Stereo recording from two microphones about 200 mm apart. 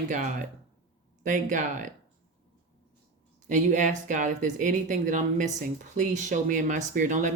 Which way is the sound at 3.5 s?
40° right (ahead or behind).